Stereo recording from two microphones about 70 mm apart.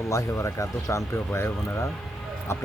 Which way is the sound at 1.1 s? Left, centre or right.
Left.